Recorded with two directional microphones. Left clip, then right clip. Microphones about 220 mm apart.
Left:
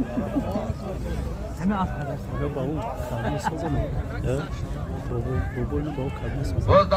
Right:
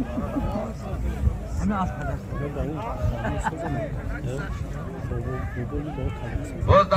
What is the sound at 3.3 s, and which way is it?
Speech, 15° left (ahead or behind).